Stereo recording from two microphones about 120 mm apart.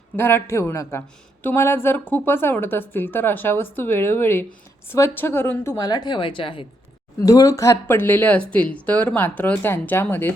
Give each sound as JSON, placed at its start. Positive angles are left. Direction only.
{"t": 0.2, "sound": "a woman's voice", "side_deg": 20}
{"t": 5.7, "sound": "speech", "side_deg": 35}
{"t": 7.2, "sound": "speech", "side_deg": 25}